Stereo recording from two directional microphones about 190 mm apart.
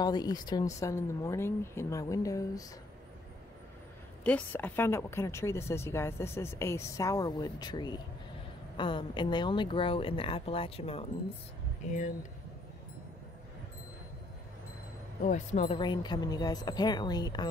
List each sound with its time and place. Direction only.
0.0 s a woman's voice: 20° left (ahead or behind)
4.2 s a woman's voice: 5° left (ahead or behind); by 11.1 s 30° left (ahead or behind)
15.2 s speech: 40° left (ahead or behind)
15.8 s speech: 25° left (ahead or behind)